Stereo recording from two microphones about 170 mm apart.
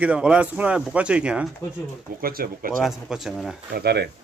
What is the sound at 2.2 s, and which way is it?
Speech, 60° right (ahead or behind).